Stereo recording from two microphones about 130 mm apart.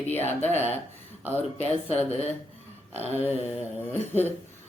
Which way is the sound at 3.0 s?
50° left (ahead or behind).